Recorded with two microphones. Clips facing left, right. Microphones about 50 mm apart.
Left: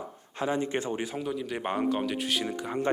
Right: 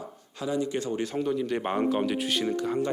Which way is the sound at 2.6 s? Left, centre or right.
Centre.